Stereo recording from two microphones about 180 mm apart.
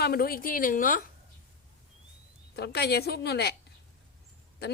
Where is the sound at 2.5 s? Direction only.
65° left (ahead or behind).